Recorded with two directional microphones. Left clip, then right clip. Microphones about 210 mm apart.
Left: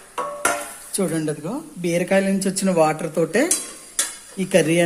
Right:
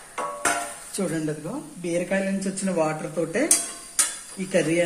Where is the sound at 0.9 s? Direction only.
35° left (ahead or behind).